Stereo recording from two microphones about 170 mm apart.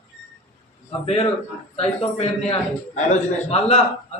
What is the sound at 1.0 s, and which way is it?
A man's voice, 40° left (ahead or behind).